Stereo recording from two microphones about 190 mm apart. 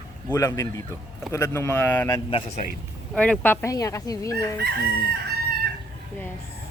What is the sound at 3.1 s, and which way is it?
Speech, 5° left (ahead or behind).